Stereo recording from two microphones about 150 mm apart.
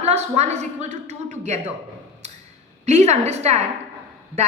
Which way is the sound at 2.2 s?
50° right (ahead or behind).